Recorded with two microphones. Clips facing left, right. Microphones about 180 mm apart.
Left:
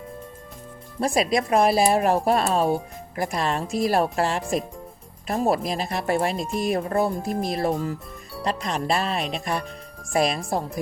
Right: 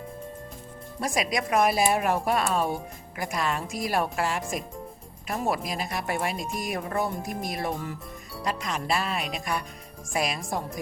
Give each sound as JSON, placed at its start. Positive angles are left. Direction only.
{"t": 1.0, "sound": "speech", "side_deg": 30}